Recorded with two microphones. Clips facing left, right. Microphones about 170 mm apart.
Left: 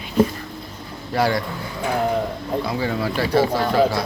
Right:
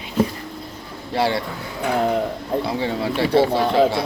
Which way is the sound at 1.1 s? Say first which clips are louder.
Left 1 dB; 25° right (ahead or behind).